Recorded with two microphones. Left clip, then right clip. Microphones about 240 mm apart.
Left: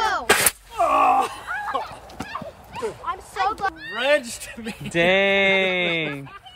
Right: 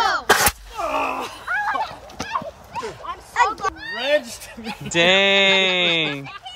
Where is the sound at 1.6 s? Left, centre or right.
Right.